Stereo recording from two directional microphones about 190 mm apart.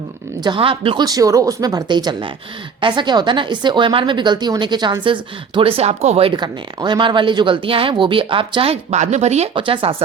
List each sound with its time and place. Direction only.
0.4 s speech: 25° right (ahead or behind)